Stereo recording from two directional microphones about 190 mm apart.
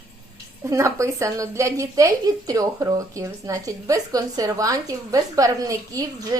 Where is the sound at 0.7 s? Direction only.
15° right (ahead or behind).